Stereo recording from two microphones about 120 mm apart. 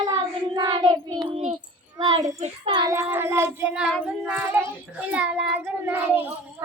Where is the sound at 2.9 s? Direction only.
20° right (ahead or behind).